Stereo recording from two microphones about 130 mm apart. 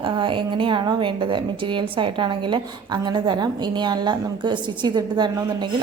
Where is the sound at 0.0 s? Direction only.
40° right (ahead or behind).